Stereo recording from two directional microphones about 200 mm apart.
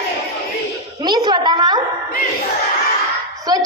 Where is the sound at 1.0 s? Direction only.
20° right (ahead or behind).